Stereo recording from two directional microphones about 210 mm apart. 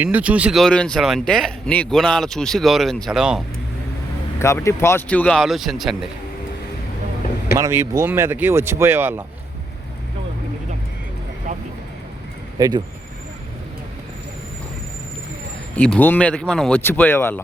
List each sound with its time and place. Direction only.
0.0 s speech: 5° right (ahead or behind)
4.4 s speech: 15° left (ahead or behind)
7.6 s speech: 15° right (ahead or behind)
11.5 s vehicle: 35° right (ahead or behind)
12.5 s speech: 20° right (ahead or behind)
15.7 s speech: 5° left (ahead or behind)